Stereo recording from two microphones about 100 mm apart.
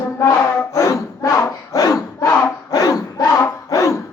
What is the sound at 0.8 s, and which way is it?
Battle cry, 30° left (ahead or behind).